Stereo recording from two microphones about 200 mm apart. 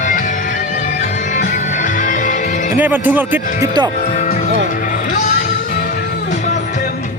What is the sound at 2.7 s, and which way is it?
Speech, 10° right (ahead or behind).